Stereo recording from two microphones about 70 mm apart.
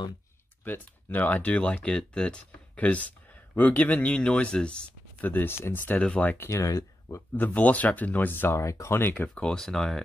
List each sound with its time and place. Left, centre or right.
1.1 s speech: left
5.2 s speech: left
6.3 s speech: left
6.6 s speech: left
7.3 s speech: left
8.5 s speech: left
9.3 s speech: centre